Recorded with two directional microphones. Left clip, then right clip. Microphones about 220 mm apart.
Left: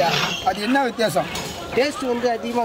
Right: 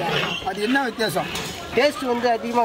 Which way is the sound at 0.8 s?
5° left (ahead or behind).